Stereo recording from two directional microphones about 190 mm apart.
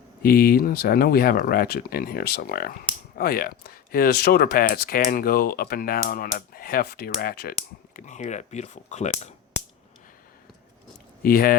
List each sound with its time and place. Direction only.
0.2 s speech: 50° left (ahead or behind)
7.9 s speech: 40° left (ahead or behind)
11.2 s speech: 50° left (ahead or behind)